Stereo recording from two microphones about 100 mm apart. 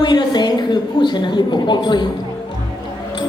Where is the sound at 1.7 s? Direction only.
50° left (ahead or behind).